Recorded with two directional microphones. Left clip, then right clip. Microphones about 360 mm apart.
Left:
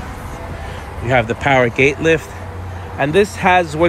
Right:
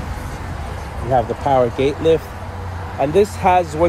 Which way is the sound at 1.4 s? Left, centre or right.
Left.